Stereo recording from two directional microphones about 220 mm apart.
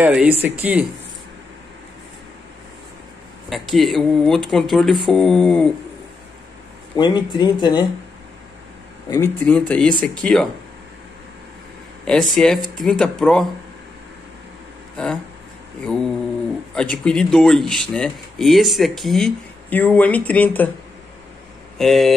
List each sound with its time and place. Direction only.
0.0 s speech: 5° right (ahead or behind)
3.4 s speech: centre (ahead or behind)
7.0 s speech: 20° left (ahead or behind)
9.1 s speech: 10° left (ahead or behind)
12.0 s speech: centre (ahead or behind)
15.8 s speech: 5° left (ahead or behind)
21.7 s speech: centre (ahead or behind)